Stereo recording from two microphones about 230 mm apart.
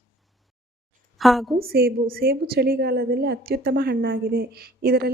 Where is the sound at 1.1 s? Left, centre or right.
Centre.